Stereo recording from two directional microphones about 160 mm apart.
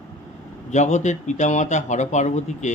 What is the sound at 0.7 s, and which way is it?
A man's voice, 45° left (ahead or behind).